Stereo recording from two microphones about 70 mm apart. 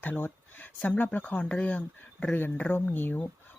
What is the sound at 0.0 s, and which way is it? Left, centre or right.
Speech, left.